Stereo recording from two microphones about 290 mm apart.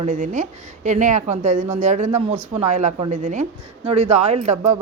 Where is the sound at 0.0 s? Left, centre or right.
Right.